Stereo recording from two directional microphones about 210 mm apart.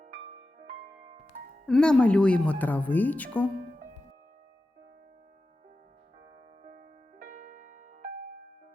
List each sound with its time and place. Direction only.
1.6 s a woman's voice: 5° left (ahead or behind)
6.6 s music: 35° right (ahead or behind)